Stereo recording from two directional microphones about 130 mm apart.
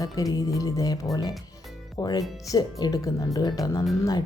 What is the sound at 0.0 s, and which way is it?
Speech, 25° left (ahead or behind).